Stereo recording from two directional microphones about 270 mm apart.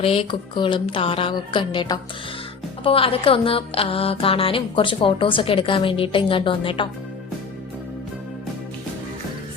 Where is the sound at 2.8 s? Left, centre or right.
Left.